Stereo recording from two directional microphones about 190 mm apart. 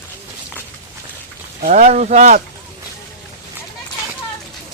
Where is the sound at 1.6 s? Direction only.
40° right (ahead or behind).